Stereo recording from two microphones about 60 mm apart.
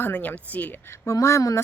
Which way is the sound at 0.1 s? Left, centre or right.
Left.